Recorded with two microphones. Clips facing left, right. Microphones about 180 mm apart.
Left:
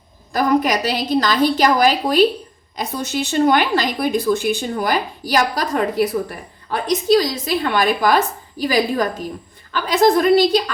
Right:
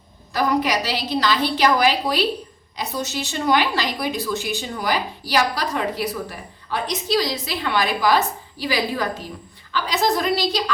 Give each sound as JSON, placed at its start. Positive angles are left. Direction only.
{"t": 0.3, "sound": "a woman's voice", "side_deg": 50}